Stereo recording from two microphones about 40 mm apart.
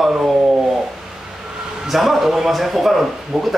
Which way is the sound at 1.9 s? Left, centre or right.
Centre.